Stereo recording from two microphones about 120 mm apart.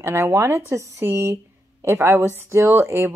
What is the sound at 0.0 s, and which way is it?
Speech, 20° right (ahead or behind).